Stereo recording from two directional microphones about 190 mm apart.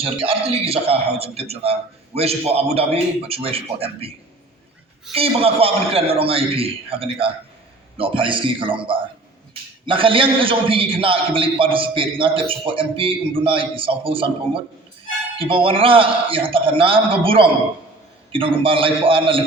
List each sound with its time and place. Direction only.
0.0 s a man's voice: 30° right (ahead or behind)
5.1 s a man's voice: 30° right (ahead or behind)